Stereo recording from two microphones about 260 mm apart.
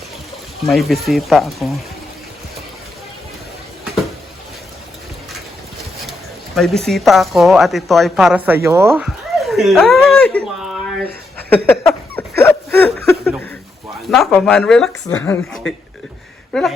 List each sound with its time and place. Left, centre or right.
0.6 s a woman's voice: centre
6.6 s a woman's voice: centre
8.9 s a sound: centre
12.4 s hiccup: centre
14.1 s a woman's voice: centre
16.5 s a sound: centre